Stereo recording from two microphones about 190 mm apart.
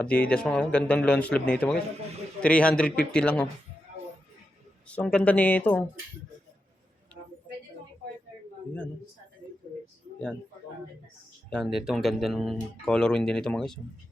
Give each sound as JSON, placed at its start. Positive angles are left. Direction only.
{"t": 0.0, "sound": "speech", "side_deg": 5}
{"t": 4.9, "sound": "speech", "side_deg": 5}
{"t": 7.1, "sound": "a sound", "side_deg": 10}
{"t": 11.5, "sound": "speech", "side_deg": 0}